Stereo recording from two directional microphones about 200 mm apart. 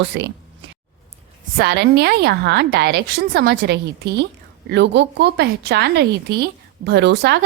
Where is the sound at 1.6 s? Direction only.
55° right (ahead or behind).